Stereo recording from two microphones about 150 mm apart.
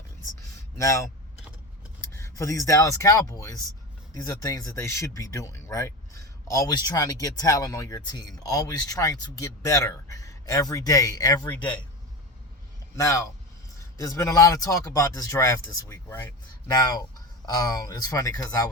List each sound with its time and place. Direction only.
0.8 s speech: 20° left (ahead or behind)
2.1 s a man's voice: 20° left (ahead or behind)
13.0 s speech: 20° left (ahead or behind)
16.6 s speech: 25° left (ahead or behind)